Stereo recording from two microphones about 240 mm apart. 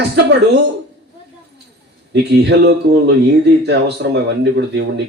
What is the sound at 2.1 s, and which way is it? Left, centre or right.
Speech, right.